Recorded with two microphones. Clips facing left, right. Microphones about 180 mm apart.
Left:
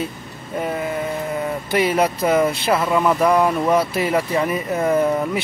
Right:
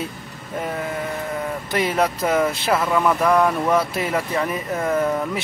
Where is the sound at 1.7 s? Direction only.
5° left (ahead or behind).